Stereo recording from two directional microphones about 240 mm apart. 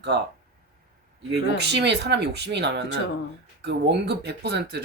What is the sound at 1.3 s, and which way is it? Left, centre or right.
Speech, right.